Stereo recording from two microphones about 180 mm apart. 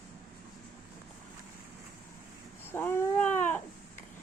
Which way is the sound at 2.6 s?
15° left (ahead or behind).